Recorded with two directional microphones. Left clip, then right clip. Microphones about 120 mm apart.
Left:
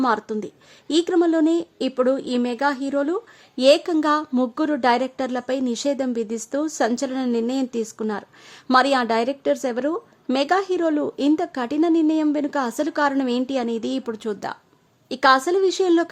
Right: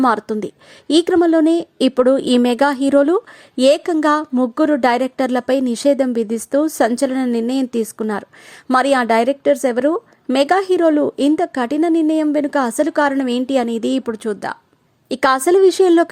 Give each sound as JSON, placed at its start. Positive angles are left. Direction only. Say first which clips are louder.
{"t": 0.0, "sound": "a woman's voice", "louder": "right 5 dB", "side_deg": -45}
{"t": 1.8, "sound": "a woman's voice", "louder": "right 9 dB", "side_deg": -60}
{"t": 3.5, "sound": "a woman's voice", "louder": "right 3 dB", "side_deg": -40}
{"t": 15.1, "sound": "a woman's voice", "louder": "right 3 dB", "side_deg": -45}